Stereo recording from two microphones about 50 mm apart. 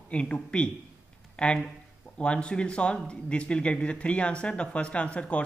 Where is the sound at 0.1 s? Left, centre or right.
Left.